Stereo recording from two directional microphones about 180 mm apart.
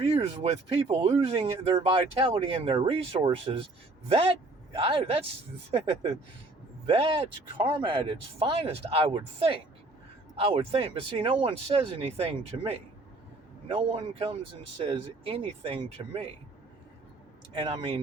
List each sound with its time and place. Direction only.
0.0 s speech: 35° right (ahead or behind)
17.5 s speech: 30° right (ahead or behind)